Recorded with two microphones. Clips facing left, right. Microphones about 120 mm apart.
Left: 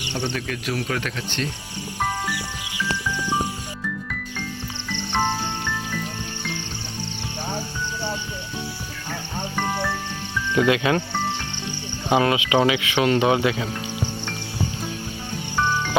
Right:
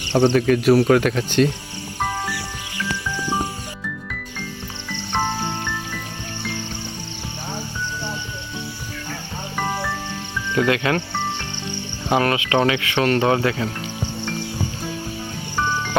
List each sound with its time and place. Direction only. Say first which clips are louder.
0.1 s speech: right 12 dB; 55° right (ahead or behind)
4.9 s music: even; centre (ahead or behind)
9.6 s music: right 1 dB; 5° right (ahead or behind)
10.7 s speech: left 1 dB; 15° left (ahead or behind)
12.0 s speech: even; 15° left (ahead or behind)